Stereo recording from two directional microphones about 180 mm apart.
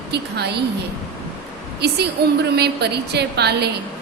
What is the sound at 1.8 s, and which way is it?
A woman's voice, 65° right (ahead or behind).